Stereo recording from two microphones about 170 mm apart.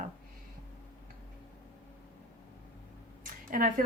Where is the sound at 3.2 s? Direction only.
55° right (ahead or behind).